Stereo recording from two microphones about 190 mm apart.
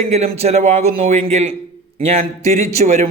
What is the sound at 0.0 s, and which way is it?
Speech, 35° right (ahead or behind).